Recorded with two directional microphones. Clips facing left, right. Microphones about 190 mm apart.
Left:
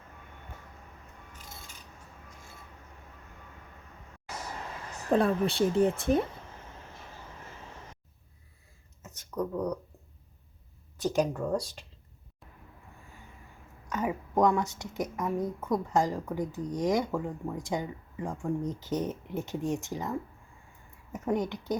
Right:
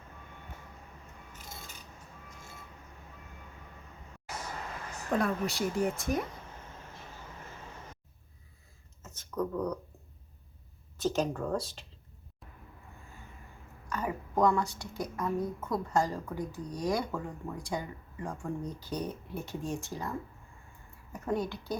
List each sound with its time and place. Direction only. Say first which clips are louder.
5.1 s speech: left 5 dB; 30° left (ahead or behind)
9.0 s a sound: left 1 dB; 15° left (ahead or behind)
10.9 s speech: left 2 dB; 15° left (ahead or behind)
13.9 s a woman's voice: left 3 dB; 20° left (ahead or behind)